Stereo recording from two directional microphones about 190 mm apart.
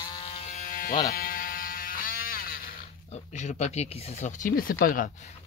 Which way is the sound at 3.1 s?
35° left (ahead or behind).